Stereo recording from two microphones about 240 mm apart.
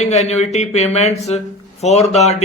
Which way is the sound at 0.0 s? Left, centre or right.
Left.